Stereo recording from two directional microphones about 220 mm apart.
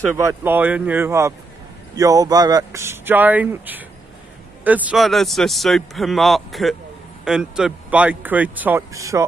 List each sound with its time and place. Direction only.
0.1 s speech: 10° right (ahead or behind)